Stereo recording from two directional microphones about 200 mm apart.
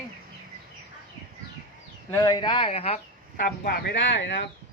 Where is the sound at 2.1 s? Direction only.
20° left (ahead or behind).